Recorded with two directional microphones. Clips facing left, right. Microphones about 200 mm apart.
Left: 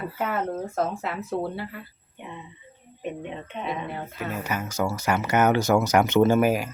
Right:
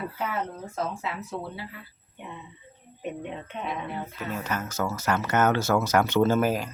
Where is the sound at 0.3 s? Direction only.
50° left (ahead or behind).